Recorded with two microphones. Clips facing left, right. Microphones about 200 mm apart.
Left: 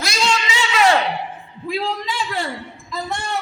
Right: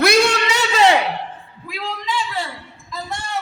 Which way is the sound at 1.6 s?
30° left (ahead or behind).